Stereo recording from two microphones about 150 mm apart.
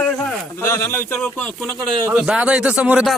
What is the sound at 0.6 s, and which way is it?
Speech, 15° left (ahead or behind).